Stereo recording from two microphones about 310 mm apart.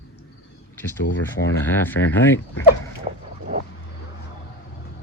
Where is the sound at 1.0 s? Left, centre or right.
Left.